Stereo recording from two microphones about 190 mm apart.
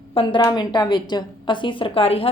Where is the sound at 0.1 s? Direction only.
25° left (ahead or behind).